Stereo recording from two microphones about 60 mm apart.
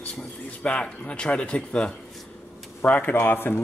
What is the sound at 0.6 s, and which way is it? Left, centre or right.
Speech, centre.